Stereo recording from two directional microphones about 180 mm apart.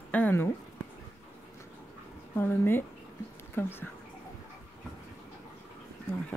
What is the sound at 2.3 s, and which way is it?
Speech, 10° left (ahead or behind).